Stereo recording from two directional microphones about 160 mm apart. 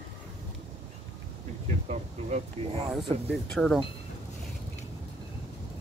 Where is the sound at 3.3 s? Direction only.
5° left (ahead or behind).